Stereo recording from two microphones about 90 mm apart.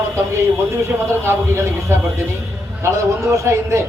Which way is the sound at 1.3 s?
30° right (ahead or behind).